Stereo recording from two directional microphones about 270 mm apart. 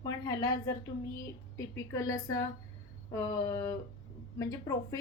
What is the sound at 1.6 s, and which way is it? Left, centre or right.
Speech, centre.